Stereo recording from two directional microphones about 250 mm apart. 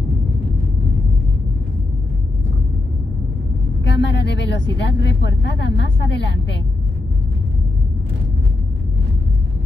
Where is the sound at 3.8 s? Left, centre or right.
Left.